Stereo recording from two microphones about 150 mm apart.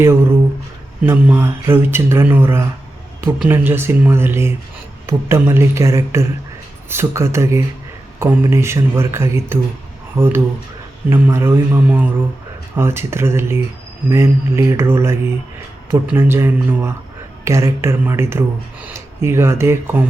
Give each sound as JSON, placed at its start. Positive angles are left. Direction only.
{"t": 0.0, "sound": "speech", "side_deg": -15}